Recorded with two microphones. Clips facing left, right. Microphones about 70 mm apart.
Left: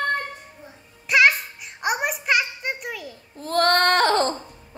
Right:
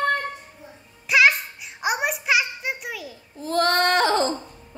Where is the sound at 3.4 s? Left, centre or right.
Left.